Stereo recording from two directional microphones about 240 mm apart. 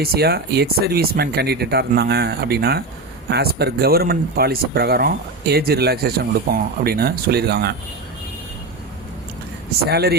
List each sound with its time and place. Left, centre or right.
0.0 s speech: right
9.8 s speech: right